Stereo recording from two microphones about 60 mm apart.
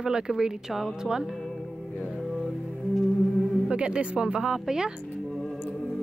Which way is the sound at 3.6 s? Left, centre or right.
Centre.